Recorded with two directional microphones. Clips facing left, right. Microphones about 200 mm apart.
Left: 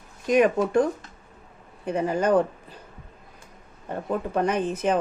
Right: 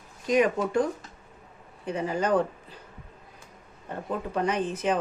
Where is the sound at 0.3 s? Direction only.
55° left (ahead or behind).